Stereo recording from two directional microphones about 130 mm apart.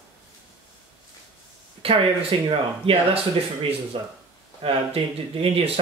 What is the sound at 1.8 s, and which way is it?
Speech, 50° right (ahead or behind).